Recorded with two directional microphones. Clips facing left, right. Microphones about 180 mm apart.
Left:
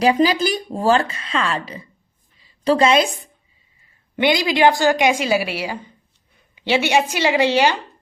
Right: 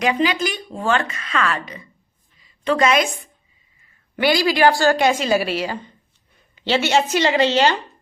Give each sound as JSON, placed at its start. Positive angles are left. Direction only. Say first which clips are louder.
{"t": 0.0, "sound": "a woman's voice", "louder": "left 4 dB", "side_deg": 35}
{"t": 4.2, "sound": "a woman's voice", "louder": "even", "side_deg": 20}